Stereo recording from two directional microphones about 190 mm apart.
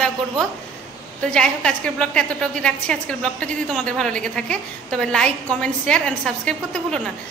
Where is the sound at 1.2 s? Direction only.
5° left (ahead or behind).